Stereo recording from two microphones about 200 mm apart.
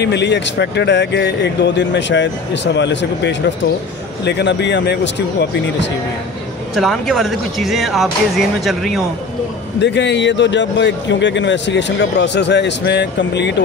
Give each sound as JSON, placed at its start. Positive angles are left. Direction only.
{"t": 0.0, "sound": "a man's voice", "side_deg": 60}
{"t": 6.7, "sound": "speech", "side_deg": 0}
{"t": 9.8, "sound": "a man's voice", "side_deg": 60}